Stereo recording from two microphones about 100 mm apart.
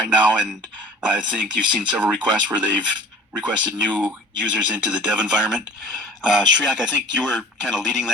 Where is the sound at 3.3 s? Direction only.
50° right (ahead or behind).